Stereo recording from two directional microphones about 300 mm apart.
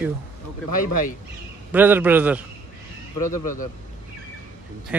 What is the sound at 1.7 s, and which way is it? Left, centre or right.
Speech, centre.